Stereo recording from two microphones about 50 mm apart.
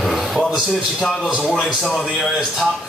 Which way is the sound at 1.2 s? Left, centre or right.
Centre.